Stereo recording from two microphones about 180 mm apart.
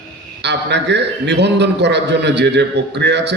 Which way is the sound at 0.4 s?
75° right (ahead or behind).